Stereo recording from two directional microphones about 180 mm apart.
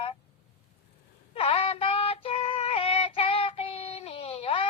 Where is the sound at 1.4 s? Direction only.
30° left (ahead or behind).